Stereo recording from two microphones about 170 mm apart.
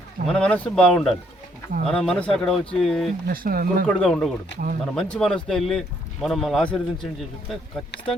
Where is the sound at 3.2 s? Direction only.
60° right (ahead or behind).